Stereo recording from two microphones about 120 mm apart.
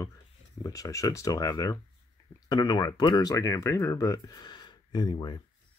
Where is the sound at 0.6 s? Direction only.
30° left (ahead or behind).